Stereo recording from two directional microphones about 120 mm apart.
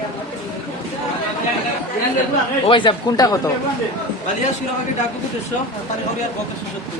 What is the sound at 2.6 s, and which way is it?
Speech, 45° left (ahead or behind).